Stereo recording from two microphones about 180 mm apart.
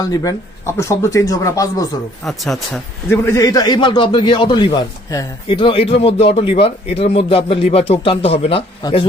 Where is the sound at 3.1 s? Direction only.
15° left (ahead or behind).